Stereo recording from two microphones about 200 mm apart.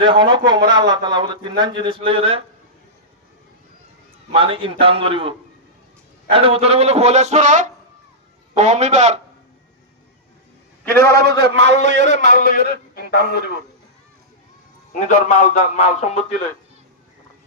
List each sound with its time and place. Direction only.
0.0 s a man's voice: 25° right (ahead or behind)
4.3 s a man's voice: 25° right (ahead or behind)
6.3 s a man's voice: 30° right (ahead or behind)
11.1 s a man's voice: 55° right (ahead or behind)
11.5 s a man's voice: 35° left (ahead or behind); by 13.4 s 55° left (ahead or behind)
14.9 s a man's voice: 40° left (ahead or behind)